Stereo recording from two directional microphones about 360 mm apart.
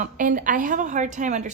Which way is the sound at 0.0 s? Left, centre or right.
Right.